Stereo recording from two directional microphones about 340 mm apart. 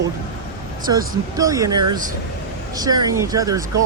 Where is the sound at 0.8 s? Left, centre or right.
Centre.